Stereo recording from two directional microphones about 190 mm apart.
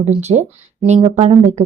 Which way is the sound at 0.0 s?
35° right (ahead or behind).